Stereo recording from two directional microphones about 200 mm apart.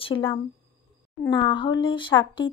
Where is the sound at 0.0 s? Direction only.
25° left (ahead or behind).